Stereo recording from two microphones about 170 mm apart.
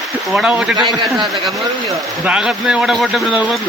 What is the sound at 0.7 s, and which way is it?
Speech, 25° right (ahead or behind).